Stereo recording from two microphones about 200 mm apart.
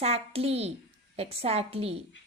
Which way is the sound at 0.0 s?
30° right (ahead or behind).